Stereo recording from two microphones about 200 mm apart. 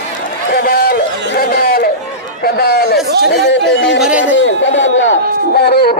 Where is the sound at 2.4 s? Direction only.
50° left (ahead or behind).